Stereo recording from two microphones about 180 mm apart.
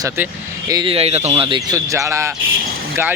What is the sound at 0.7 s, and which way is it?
Speech, 30° right (ahead or behind).